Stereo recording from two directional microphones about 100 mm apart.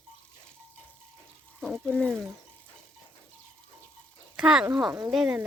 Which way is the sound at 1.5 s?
5° left (ahead or behind).